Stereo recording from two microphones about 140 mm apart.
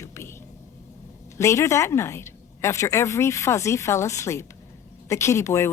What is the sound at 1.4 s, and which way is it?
A woman's voice, 20° left (ahead or behind).